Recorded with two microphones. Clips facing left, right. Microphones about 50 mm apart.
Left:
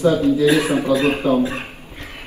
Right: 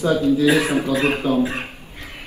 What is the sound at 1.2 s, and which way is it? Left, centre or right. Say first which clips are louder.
Speech: left 2 dB; left.